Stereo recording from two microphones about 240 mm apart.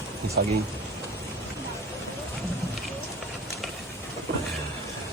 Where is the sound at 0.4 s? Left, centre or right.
Right.